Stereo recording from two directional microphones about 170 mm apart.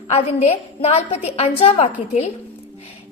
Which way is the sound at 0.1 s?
40° left (ahead or behind).